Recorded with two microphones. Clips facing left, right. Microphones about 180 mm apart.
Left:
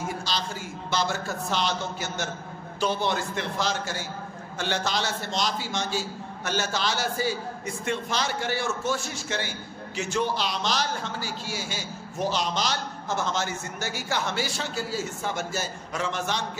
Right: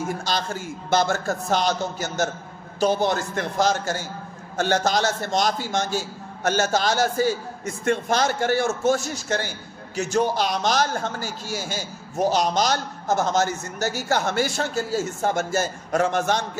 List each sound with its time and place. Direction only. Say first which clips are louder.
0.2 s a man's voice: right 5 dB; 50° right (ahead or behind)